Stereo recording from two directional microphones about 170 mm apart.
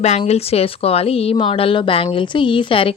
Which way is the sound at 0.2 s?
35° left (ahead or behind).